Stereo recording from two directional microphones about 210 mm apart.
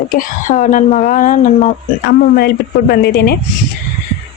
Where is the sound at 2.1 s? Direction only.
50° left (ahead or behind).